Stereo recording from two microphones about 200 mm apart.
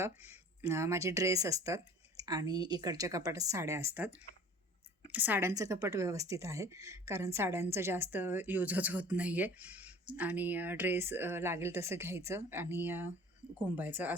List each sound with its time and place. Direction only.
0.7 s a woman's voice: 15° right (ahead or behind)
5.1 s a woman's voice: 10° right (ahead or behind)